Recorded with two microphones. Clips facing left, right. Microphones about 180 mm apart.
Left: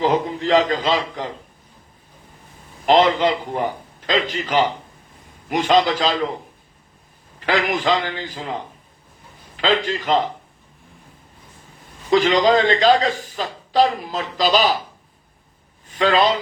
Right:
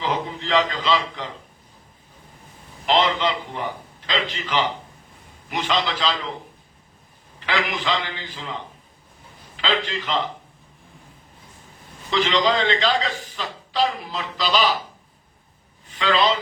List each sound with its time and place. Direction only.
0.0 s a man's voice: 45° left (ahead or behind)
2.8 s a man's voice: 45° left (ahead or behind)
7.3 s a man's voice: 45° left (ahead or behind)
12.1 s a man's voice: 45° left (ahead or behind)
15.9 s a man's voice: 45° left (ahead or behind)